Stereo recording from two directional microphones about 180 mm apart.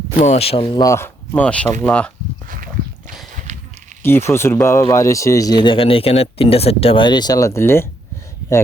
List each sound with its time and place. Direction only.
0.2 s speech: 35° left (ahead or behind); by 2.0 s 10° left (ahead or behind)
3.3 s walk: 45° right (ahead or behind)
4.0 s speech: 15° left (ahead or behind)